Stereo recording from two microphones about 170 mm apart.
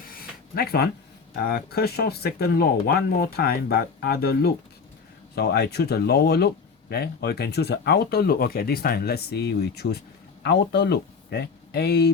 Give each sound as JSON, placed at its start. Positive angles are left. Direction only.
{"t": 0.0, "sound": "a sound", "side_deg": 60}
{"t": 1.5, "sound": "speech", "side_deg": 65}
{"t": 10.4, "sound": "speech", "side_deg": 85}